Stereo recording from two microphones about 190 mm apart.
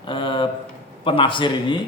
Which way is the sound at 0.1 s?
25° left (ahead or behind).